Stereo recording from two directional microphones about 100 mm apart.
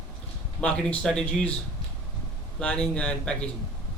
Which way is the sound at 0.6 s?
10° left (ahead or behind).